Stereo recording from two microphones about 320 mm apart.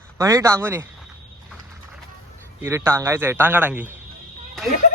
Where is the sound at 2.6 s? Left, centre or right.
Centre.